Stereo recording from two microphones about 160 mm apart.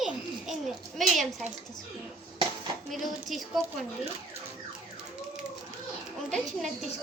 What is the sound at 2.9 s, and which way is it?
Speech, centre (ahead or behind).